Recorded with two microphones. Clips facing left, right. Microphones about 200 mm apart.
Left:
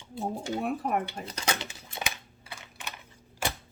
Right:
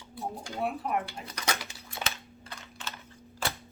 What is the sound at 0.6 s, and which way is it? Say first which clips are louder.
Speech: right 1 dB; 45° left (ahead or behind).